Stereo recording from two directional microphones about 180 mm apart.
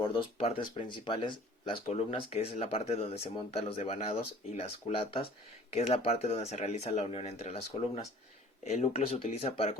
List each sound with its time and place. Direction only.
0.0 s speech: 30° left (ahead or behind)